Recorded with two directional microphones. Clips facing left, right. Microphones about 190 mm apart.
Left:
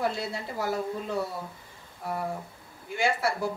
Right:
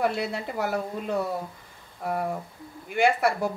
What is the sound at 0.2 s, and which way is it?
Speech, 65° right (ahead or behind).